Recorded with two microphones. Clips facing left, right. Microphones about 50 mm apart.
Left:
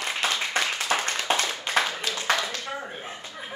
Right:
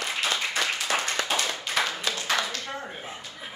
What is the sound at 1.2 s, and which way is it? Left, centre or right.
Clapping, left.